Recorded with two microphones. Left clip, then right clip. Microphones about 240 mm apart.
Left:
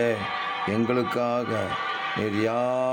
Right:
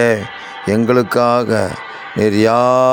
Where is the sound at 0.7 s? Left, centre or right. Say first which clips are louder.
Right 14 dB; right.